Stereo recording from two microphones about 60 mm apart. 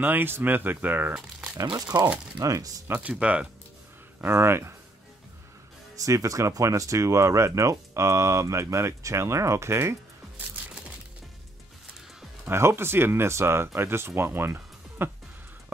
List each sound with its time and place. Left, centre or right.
0.0 s speech: right
1.6 s speech: right
2.4 s speech: right
3.0 s speech: right
4.2 s speech: right
5.9 s speech: right
12.4 s speech: right